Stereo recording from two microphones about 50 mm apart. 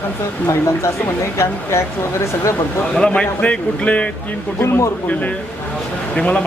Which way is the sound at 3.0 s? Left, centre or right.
Centre.